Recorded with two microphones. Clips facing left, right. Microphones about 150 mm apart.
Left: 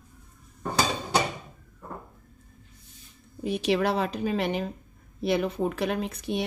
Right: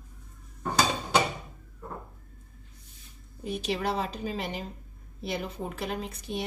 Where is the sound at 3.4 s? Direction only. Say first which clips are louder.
Left 6 dB; 70° left (ahead or behind).